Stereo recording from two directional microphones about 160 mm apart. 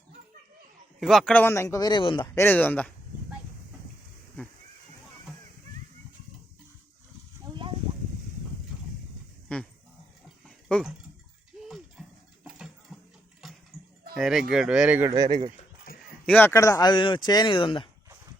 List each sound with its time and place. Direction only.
0.9 s speech: centre (ahead or behind); by 2.2 s 30° left (ahead or behind)
2.2 s speech: 15° left (ahead or behind)
9.5 s dog: 5° left (ahead or behind)
12.5 s a sound: 5° right (ahead or behind)
14.2 s speech: centre (ahead or behind)
15.1 s speech: 25° right (ahead or behind)
15.9 s a sound: 65° left (ahead or behind)
16.2 s speech: 10° left (ahead or behind); by 17.8 s 30° left (ahead or behind)